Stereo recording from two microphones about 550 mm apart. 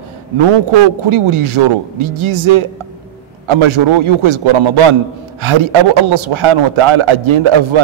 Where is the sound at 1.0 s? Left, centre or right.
Right.